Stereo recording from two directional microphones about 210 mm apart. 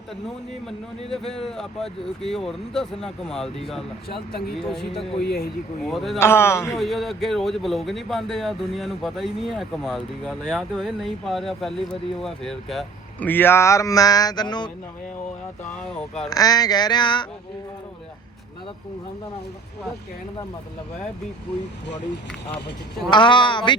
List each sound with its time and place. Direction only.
1.1 s speech: centre (ahead or behind)
5.2 s speech: 50° left (ahead or behind)
5.8 s speech: centre (ahead or behind)
6.1 s speech: 10° left (ahead or behind)
6.7 s speech: centre (ahead or behind); by 14.7 s 20° left (ahead or behind)
15.8 s speech: 5° left (ahead or behind)
16.3 s a sound: 20° left (ahead or behind)
23.0 s a sound: 20° left (ahead or behind)